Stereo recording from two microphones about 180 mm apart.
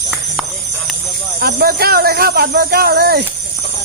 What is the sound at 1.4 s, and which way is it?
Speech, 60° right (ahead or behind).